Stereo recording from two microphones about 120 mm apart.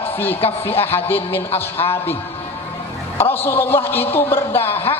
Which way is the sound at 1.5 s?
55° left (ahead or behind).